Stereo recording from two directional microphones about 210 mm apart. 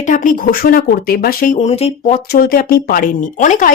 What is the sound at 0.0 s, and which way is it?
Speech, 40° left (ahead or behind).